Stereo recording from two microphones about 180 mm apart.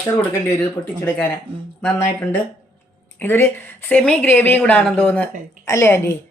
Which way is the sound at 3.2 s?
10° left (ahead or behind).